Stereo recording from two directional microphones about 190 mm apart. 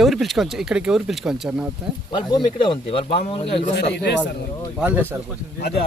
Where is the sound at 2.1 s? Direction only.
25° left (ahead or behind).